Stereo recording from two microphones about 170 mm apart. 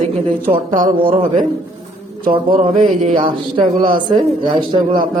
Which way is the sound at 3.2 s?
30° right (ahead or behind).